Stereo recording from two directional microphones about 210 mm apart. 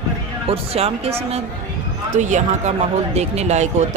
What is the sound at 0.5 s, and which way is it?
Speech, 30° right (ahead or behind).